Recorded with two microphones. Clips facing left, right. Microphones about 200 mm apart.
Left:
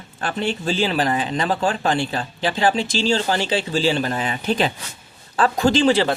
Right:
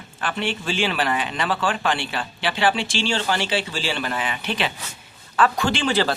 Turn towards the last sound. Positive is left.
turn(degrees=30)  # may be behind; listen again after turning